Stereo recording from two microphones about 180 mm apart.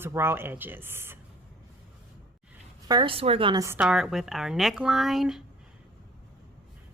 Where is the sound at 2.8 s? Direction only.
25° right (ahead or behind).